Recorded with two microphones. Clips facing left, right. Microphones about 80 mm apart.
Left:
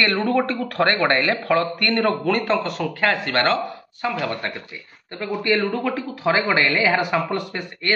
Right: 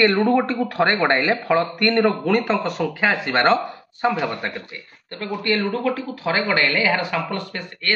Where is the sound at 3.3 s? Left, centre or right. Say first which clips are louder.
Right 3 dB; right.